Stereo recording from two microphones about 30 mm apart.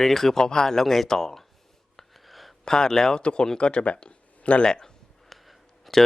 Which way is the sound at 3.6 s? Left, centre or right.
Left.